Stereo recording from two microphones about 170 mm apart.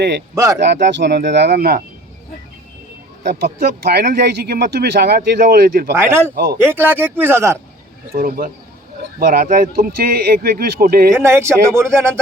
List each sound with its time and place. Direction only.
0.6 s speech: 90° right; by 1.8 s 60° right (ahead or behind)
3.2 s speech: 70° right (ahead or behind)
6.0 s speech: 15° right (ahead or behind)
6.3 s speech: 65° right (ahead or behind)
6.6 s speech: 15° right (ahead or behind)
8.1 s speech: 55° right (ahead or behind)
11.1 s speech: 15° right (ahead or behind)